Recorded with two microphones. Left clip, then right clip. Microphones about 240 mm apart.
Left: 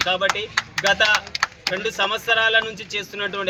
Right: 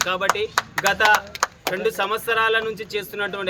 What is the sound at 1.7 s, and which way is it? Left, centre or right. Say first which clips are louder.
Speech: even; centre.